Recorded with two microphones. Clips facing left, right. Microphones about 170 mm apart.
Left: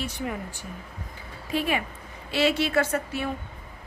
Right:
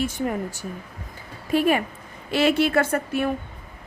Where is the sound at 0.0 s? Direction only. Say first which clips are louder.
Right 6 dB; 45° right (ahead or behind).